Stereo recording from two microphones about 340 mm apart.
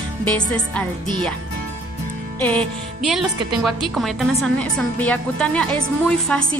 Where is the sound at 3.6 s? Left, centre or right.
Centre.